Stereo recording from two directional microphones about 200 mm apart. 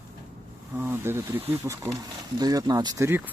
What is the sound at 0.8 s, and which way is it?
Speech, 10° right (ahead or behind).